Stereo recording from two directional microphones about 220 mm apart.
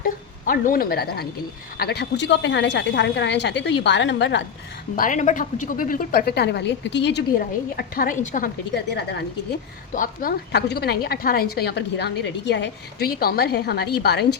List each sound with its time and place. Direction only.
0.0 s a woman's voice: 40° left (ahead or behind)
4.9 s a woman's voice: 35° left (ahead or behind)
8.7 s a woman's voice: 50° left (ahead or behind)
9.9 s a woman's voice: 40° left (ahead or behind)